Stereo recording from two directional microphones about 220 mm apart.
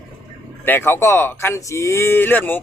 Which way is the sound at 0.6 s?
10° left (ahead or behind).